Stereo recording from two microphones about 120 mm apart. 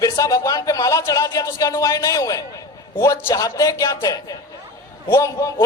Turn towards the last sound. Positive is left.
turn(degrees=30)  # may be behind; listen again after turning